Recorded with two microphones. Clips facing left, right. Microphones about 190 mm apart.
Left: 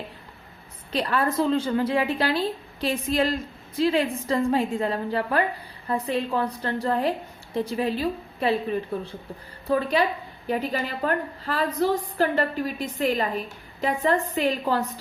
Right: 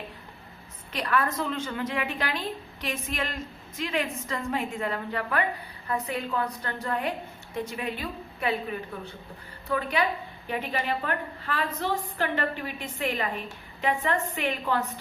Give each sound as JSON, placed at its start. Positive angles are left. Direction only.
{"t": 0.9, "sound": "a woman's voice", "side_deg": 30}